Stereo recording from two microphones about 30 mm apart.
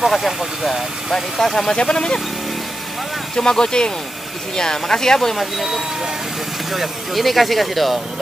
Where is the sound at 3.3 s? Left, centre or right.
Centre.